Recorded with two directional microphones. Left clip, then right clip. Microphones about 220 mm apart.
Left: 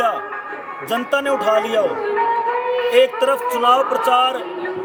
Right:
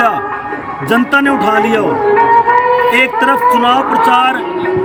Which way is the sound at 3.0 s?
5° left (ahead or behind).